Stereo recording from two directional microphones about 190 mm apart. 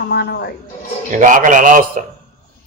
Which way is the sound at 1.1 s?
45° right (ahead or behind).